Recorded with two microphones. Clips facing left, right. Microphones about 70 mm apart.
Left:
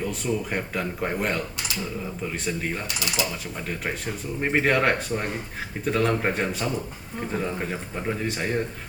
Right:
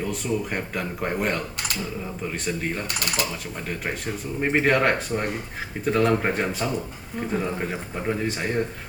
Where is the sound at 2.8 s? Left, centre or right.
Right.